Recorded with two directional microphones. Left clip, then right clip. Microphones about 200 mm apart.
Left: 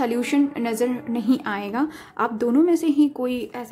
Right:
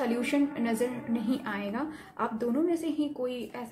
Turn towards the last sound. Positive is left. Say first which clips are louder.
# left 7 dB
turn(degrees=45)  # may be behind; listen again after turning